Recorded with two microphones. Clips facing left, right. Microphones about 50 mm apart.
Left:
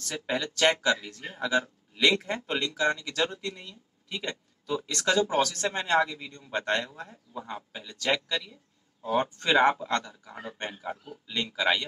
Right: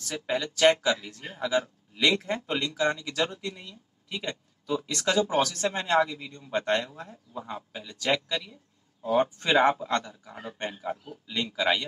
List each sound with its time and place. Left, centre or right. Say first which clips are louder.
0.0 s speech: right 1 dB; centre